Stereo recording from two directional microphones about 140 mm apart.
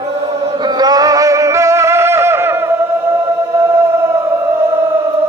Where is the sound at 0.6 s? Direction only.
30° right (ahead or behind).